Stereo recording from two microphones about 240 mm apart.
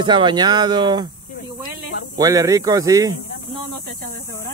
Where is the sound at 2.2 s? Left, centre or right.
Centre.